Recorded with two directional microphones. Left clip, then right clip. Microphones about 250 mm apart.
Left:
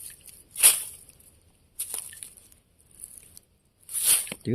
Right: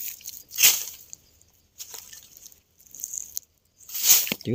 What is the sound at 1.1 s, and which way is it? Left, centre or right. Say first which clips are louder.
Drip: right 15 dB; centre.